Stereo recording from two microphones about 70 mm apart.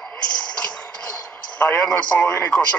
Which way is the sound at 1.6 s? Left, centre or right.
Centre.